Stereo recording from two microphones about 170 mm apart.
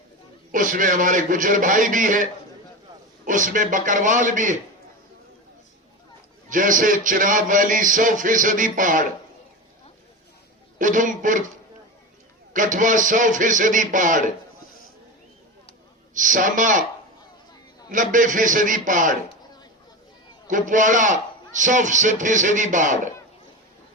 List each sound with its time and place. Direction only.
0.5 s a man's voice: 50° right (ahead or behind)
3.2 s a man's voice: 50° right (ahead or behind)
6.5 s a man's voice: 50° right (ahead or behind)
10.8 s a man's voice: 50° right (ahead or behind)
12.5 s a man's voice: 50° right (ahead or behind)
16.1 s a man's voice: 50° right (ahead or behind)
17.9 s a man's voice: 50° right (ahead or behind)
20.5 s a man's voice: 50° right (ahead or behind)